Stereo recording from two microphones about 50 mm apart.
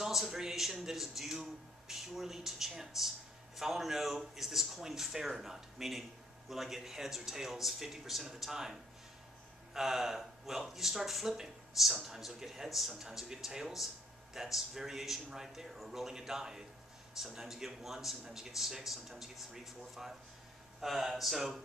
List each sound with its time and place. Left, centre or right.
0.0 s speech: centre
9.8 s speech: centre